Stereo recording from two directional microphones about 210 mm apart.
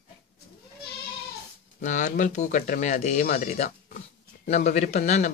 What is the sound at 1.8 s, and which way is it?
A man's voice, 35° left (ahead or behind).